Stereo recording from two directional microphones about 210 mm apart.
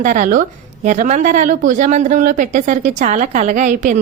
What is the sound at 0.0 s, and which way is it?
A woman's voice, 35° right (ahead or behind).